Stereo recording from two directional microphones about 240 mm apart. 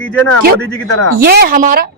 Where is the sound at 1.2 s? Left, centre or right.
Right.